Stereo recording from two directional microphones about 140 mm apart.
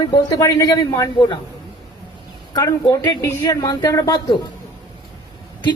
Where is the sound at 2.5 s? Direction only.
25° left (ahead or behind).